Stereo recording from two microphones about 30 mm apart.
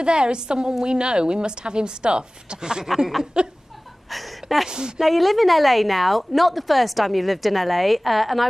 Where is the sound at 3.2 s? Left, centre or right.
Right.